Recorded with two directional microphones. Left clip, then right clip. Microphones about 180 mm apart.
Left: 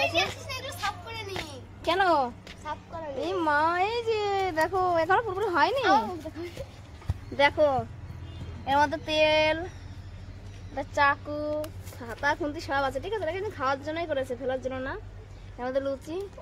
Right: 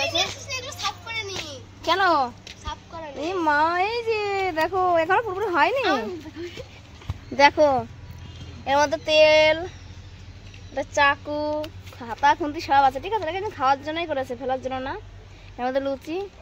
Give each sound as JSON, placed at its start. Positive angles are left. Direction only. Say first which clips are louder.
{"t": 0.1, "sound": "children playing", "louder": "right 3 dB", "side_deg": 65}
{"t": 1.9, "sound": "speech", "louder": "right 4 dB", "side_deg": -10}
{"t": 3.3, "sound": "speech", "louder": "right 4 dB", "side_deg": -45}
{"t": 7.3, "sound": "a child's voice", "louder": "right 6 dB", "side_deg": -45}
{"t": 10.7, "sound": "speech", "louder": "right 4 dB", "side_deg": -30}